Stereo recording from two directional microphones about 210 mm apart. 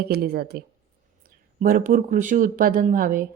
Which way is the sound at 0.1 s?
45° right (ahead or behind).